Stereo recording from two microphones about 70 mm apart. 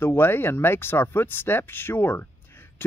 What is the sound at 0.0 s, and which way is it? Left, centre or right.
Speech, left.